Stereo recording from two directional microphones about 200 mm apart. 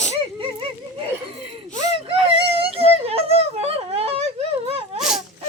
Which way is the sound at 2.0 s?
25° right (ahead or behind).